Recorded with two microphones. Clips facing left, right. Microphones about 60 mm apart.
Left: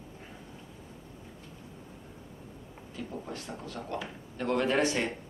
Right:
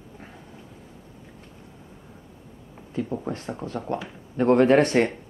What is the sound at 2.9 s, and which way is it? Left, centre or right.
Speech, right.